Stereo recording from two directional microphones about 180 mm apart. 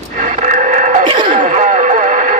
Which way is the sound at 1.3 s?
45° right (ahead or behind).